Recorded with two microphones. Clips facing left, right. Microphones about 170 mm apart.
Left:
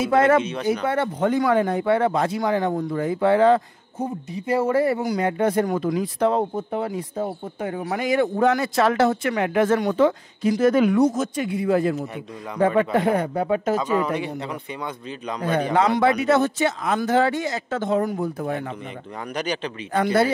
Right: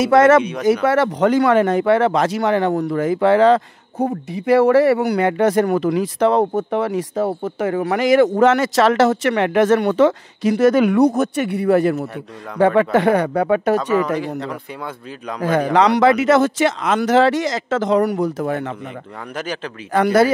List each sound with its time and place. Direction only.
0.0 s speech: 85° right
12.5 s speech: 90° right; by 13.7 s 75° right (ahead or behind)
14.2 s speech: centre (ahead or behind)
15.4 s speech: 90° right
19.3 s speech: centre (ahead or behind)
19.9 s speech: 90° right